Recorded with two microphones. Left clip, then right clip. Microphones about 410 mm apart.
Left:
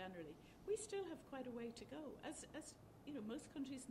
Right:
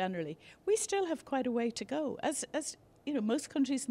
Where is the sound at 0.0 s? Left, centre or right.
Right.